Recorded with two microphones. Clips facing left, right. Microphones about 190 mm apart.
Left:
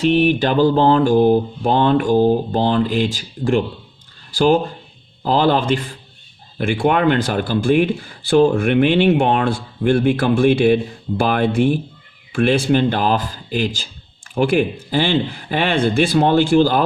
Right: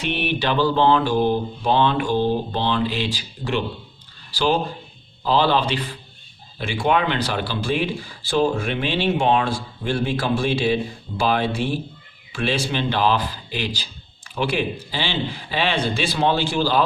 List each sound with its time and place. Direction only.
0.0 s mantra: 40° left (ahead or behind)
4.3 s a man's voice: 50° left (ahead or behind)
5.2 s mantra: 50° left (ahead or behind)
6.6 s speech: 55° left (ahead or behind)
11.2 s mantra: 55° left (ahead or behind)